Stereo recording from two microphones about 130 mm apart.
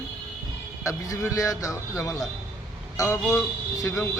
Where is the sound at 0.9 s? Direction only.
25° left (ahead or behind).